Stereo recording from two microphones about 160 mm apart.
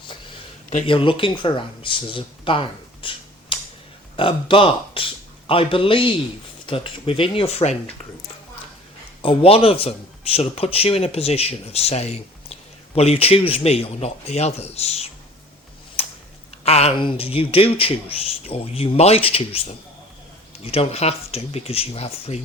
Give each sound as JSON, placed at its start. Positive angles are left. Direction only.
{"t": 0.9, "sound": "speech", "side_deg": 35}
{"t": 9.2, "sound": "speech", "side_deg": 35}
{"t": 16.6, "sound": "speech", "side_deg": 40}
{"t": 20.7, "sound": "speech", "side_deg": 40}